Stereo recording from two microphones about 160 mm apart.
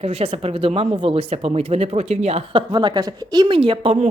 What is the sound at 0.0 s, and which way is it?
Speech, 40° right (ahead or behind).